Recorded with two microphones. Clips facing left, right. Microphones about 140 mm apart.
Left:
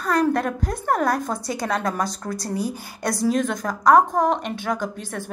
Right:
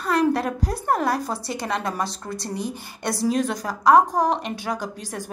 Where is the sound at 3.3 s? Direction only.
35° right (ahead or behind).